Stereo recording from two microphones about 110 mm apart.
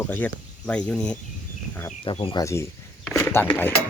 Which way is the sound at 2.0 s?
50° left (ahead or behind).